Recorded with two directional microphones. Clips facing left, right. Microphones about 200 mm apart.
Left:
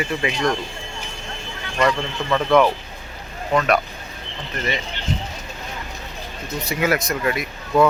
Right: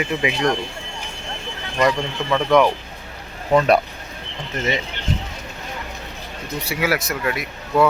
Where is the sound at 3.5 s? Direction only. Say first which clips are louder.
Right 3 dB; 25° right (ahead or behind).